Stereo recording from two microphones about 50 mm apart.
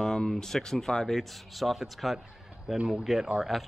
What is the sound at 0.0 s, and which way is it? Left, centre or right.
Speech, centre.